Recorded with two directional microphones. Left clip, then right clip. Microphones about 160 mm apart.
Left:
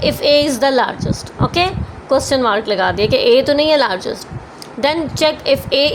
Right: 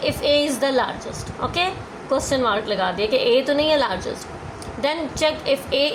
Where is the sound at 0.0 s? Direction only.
50° left (ahead or behind).